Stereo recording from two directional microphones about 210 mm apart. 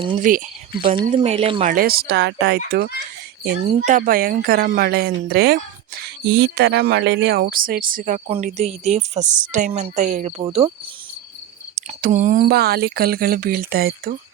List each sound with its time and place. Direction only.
0.2 s speech: 40° right (ahead or behind)
0.8 s speech: 25° right (ahead or behind)
1.6 s speech: 45° right (ahead or behind); by 10.7 s 25° right (ahead or behind)
11.7 s speech: 35° right (ahead or behind)